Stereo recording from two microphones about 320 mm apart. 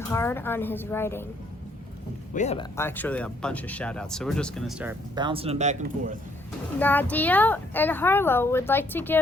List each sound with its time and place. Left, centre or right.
0.1 s speech: centre
2.3 s speech: left
2.7 s speech: centre; by 6.1 s right
6.7 s speech: centre